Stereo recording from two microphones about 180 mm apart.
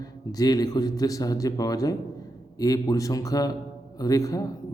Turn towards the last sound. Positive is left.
turn(degrees=20)  # may be behind; listen again after turning